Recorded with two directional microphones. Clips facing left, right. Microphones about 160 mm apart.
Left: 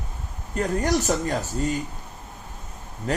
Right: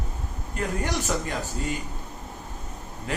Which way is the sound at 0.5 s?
40° left (ahead or behind).